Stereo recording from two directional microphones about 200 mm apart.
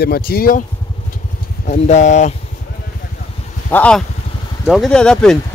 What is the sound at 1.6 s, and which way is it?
Speech, 35° left (ahead or behind).